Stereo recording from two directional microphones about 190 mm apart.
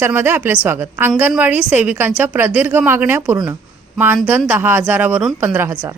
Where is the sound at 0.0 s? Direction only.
10° right (ahead or behind).